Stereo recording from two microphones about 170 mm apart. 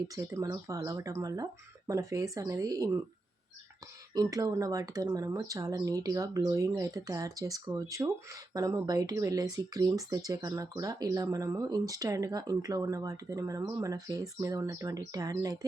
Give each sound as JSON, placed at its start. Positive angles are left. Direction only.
{"t": 0.2, "sound": "speech", "side_deg": -15}
{"t": 4.1, "sound": "speech", "side_deg": -20}